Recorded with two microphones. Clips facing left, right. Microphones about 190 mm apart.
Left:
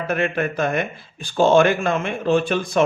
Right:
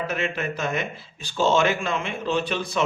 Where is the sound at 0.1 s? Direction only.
55° left (ahead or behind).